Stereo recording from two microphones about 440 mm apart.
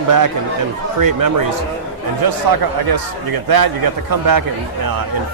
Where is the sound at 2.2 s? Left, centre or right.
Right.